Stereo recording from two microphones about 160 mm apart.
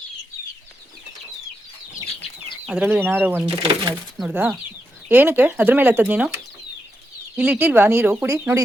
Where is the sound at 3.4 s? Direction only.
30° right (ahead or behind).